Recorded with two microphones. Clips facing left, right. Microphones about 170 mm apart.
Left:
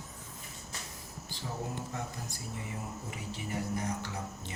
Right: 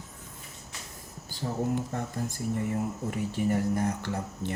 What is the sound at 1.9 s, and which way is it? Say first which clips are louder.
Speech: right 7 dB; 50° right (ahead or behind).